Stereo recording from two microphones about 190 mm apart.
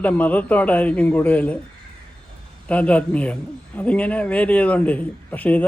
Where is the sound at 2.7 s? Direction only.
5° left (ahead or behind).